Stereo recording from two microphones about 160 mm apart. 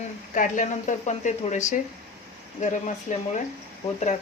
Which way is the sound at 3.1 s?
50° left (ahead or behind).